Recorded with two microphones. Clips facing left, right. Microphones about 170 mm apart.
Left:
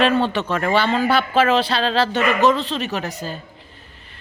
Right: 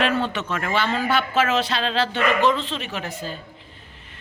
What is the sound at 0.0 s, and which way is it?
Speech, 30° left (ahead or behind).